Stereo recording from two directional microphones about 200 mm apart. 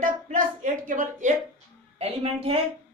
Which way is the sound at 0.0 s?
40° right (ahead or behind).